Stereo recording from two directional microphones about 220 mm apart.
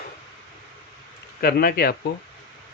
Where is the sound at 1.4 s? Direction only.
45° left (ahead or behind).